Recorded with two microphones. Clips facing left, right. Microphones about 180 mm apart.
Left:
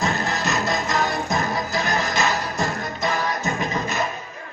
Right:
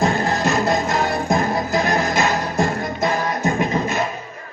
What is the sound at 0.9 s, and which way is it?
Music, 30° right (ahead or behind).